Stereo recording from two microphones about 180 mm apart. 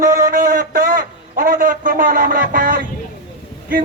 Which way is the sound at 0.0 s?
45° right (ahead or behind).